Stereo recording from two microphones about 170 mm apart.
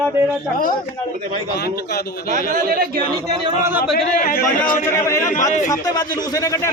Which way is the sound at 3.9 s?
60° left (ahead or behind).